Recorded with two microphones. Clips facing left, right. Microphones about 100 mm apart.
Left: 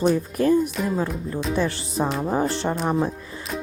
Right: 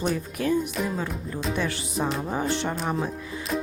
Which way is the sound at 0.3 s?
40° left (ahead or behind).